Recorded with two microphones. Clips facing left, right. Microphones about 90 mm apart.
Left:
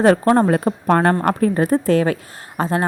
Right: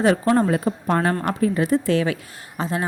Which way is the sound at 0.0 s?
50° left (ahead or behind).